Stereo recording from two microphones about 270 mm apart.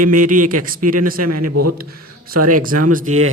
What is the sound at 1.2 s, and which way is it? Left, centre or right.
Speech, right.